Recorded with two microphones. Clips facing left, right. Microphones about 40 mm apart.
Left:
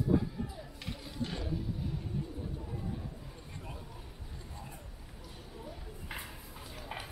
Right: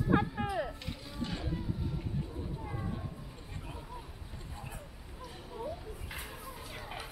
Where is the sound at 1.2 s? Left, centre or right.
Centre.